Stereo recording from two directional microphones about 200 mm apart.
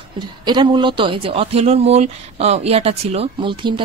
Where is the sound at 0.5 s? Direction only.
25° right (ahead or behind).